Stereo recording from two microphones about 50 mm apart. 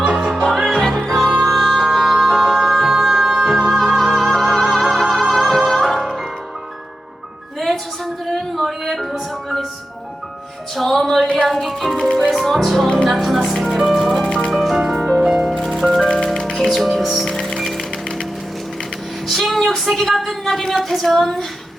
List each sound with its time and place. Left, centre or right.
0.0 s music: right
0.4 s music: centre
7.6 s music: centre
10.8 s music: centre
14.3 s music: centre
14.5 s music: centre
15.5 s music: centre
16.6 s music: centre
19.3 s a sound: centre